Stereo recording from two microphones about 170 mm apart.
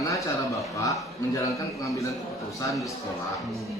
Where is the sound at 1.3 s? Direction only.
20° left (ahead or behind).